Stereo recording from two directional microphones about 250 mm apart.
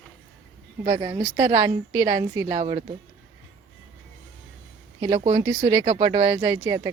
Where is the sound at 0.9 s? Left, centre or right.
Centre.